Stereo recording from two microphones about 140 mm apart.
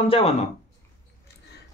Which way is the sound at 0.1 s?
45° left (ahead or behind).